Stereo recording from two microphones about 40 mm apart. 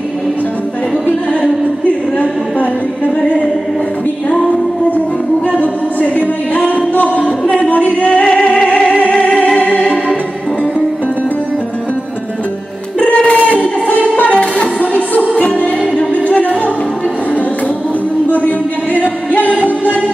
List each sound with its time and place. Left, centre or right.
1.9 s a capella: left
3.2 s a sound: left
5.5 s music: left
13.0 s a sound: left
13.5 s music: left
14.3 s music: left
14.8 s music: left